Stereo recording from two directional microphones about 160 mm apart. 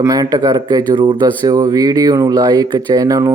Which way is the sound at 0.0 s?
20° right (ahead or behind).